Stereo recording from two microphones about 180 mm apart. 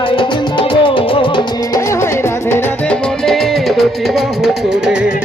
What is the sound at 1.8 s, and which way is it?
Music, 15° left (ahead or behind).